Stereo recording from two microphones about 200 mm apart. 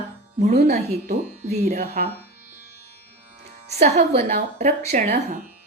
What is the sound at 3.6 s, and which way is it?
Speech, 35° right (ahead or behind).